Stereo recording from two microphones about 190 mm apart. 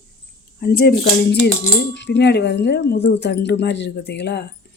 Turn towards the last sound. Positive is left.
turn(degrees=65)  # may be behind; listen again after turning